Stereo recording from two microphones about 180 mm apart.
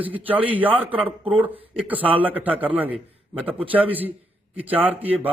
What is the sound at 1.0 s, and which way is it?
Speech, 30° right (ahead or behind).